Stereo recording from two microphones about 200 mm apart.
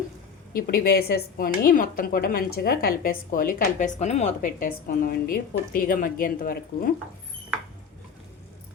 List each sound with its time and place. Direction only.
0.5 s a woman's voice: 50° left (ahead or behind)